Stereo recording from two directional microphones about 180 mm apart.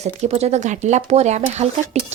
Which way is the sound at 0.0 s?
35° right (ahead or behind).